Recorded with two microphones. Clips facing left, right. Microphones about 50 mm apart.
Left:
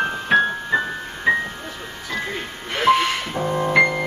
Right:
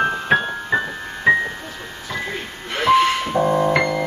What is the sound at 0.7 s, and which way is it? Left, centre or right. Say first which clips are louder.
Music: even; right.